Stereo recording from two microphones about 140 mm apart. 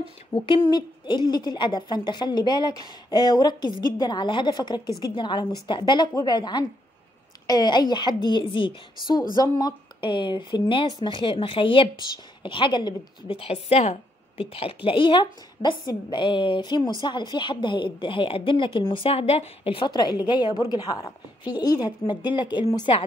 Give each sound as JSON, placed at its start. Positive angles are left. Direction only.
{"t": 0.3, "sound": "a woman's voice", "side_deg": 35}